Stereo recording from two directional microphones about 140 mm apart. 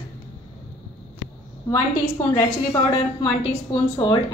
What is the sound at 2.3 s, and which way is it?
A woman's voice, 25° left (ahead or behind).